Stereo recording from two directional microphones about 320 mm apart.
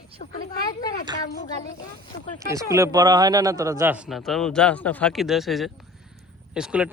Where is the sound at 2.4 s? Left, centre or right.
Centre.